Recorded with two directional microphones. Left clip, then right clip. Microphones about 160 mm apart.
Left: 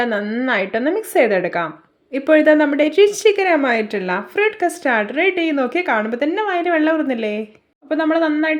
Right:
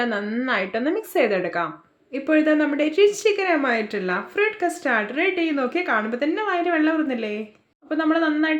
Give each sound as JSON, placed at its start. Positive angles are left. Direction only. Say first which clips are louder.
{"t": 0.0, "sound": "a woman's voice", "louder": "left 5 dB", "side_deg": 25}